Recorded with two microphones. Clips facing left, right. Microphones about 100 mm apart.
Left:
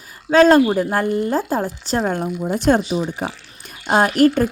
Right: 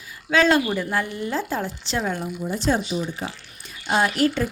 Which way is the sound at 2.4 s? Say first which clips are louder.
Left 6 dB; 65° left (ahead or behind).